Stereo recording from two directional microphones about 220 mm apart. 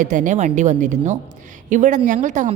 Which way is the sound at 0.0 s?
35° right (ahead or behind).